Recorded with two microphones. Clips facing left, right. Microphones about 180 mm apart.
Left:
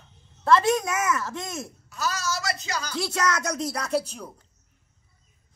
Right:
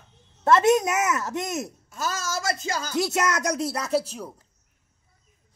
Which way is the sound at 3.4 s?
10° right (ahead or behind).